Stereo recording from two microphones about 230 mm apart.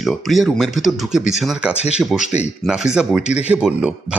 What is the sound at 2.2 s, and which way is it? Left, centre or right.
Speech, left.